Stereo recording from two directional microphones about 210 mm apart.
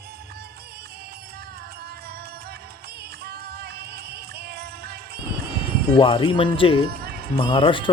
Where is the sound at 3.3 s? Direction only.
50° right (ahead or behind).